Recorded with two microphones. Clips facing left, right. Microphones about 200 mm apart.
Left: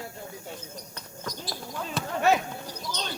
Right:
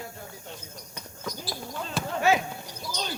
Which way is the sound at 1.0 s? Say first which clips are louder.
Right 2 dB; 5° right (ahead or behind).